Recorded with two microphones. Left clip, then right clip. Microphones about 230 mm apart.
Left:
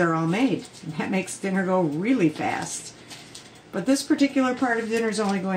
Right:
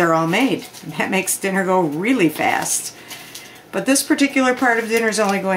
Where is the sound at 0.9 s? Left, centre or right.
Right.